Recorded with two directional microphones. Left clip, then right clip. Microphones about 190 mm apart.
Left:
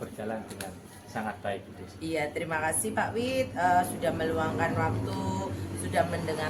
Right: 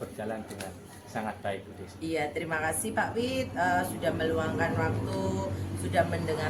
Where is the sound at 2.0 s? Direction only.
15° left (ahead or behind).